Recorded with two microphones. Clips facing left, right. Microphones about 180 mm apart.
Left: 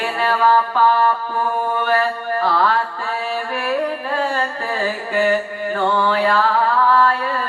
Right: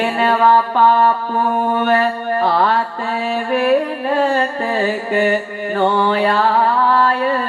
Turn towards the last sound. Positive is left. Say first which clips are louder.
# right 2 dB
turn(degrees=-20)  # may be behind; listen again after turning